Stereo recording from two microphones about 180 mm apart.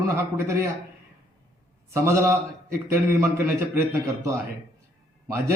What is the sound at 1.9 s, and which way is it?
Speech, 15° right (ahead or behind).